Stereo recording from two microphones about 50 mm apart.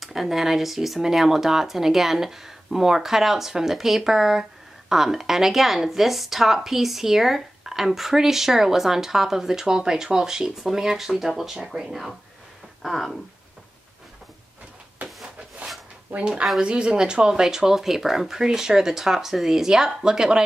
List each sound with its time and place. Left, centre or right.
0.0 s speech: centre
16.2 s speech: right